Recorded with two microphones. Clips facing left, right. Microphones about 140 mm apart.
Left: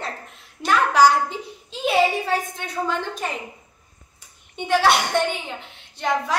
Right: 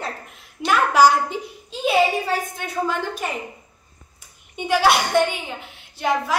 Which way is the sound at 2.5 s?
10° right (ahead or behind).